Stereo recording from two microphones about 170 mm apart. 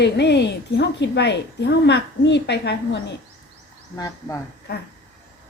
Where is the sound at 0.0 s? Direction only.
85° left.